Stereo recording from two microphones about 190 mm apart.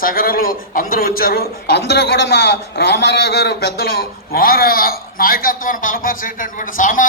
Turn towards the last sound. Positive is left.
turn(degrees=45)  # may be behind; listen again after turning